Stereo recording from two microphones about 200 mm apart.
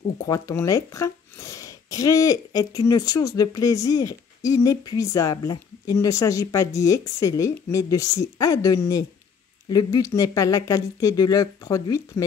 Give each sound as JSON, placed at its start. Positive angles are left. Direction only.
{"t": 0.3, "sound": "speech", "side_deg": 15}